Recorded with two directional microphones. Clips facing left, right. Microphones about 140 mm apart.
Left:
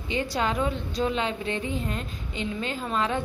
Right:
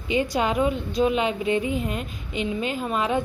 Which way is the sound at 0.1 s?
15° right (ahead or behind).